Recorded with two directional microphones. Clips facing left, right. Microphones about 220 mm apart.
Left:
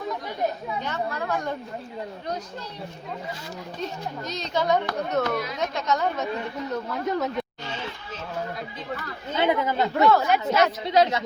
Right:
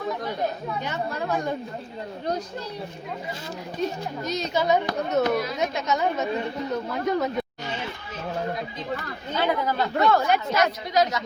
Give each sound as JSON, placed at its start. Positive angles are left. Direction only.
{"t": 0.9, "sound": "speech", "side_deg": -15}
{"t": 3.8, "sound": "speech", "side_deg": -10}
{"t": 9.4, "sound": "a woman's voice", "side_deg": 20}
{"t": 10.1, "sound": "speech", "side_deg": 5}
{"t": 10.6, "sound": "a woman's voice", "side_deg": 30}